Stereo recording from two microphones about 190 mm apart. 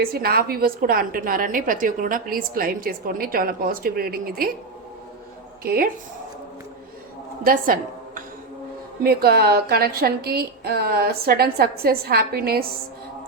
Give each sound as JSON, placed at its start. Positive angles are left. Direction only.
{"t": 0.0, "sound": "a woman's voice", "side_deg": -50}
{"t": 5.6, "sound": "a woman's voice", "side_deg": -50}
{"t": 7.4, "sound": "a woman's voice", "side_deg": -45}